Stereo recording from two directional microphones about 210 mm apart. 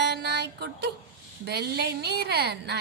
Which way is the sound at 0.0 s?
50° right (ahead or behind).